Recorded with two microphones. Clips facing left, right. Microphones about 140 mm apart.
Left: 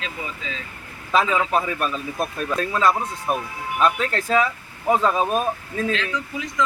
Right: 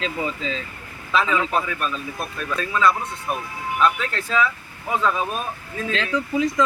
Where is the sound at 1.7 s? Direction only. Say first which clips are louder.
Left 3 dB; 40° left (ahead or behind).